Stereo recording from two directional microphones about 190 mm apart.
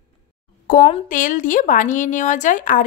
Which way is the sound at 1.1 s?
45° left (ahead or behind).